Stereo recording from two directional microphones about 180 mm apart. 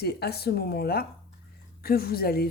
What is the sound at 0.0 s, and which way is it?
A woman's voice, 60° left (ahead or behind).